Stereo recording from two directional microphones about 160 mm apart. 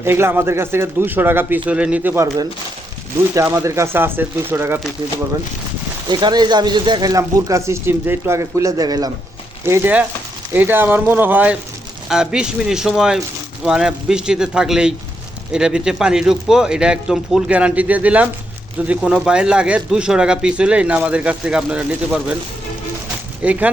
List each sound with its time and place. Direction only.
0.0 s speech: 15° right (ahead or behind)
6.1 s speech: 25° right (ahead or behind); by 22.4 s 5° right (ahead or behind)
23.4 s speech: 10° right (ahead or behind)